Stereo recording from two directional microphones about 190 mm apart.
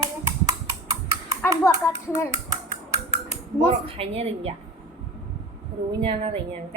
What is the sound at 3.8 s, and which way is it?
Speech, 30° right (ahead or behind).